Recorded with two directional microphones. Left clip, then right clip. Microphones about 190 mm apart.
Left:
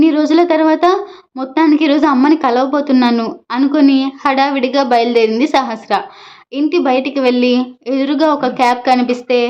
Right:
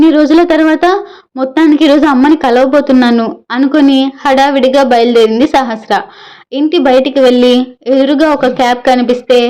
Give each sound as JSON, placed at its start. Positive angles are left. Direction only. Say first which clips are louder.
{"t": 0.0, "sound": "a woman's voice", "louder": "right 5 dB", "side_deg": -15}